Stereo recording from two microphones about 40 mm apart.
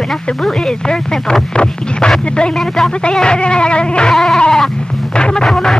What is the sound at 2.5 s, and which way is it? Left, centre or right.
Speech, centre.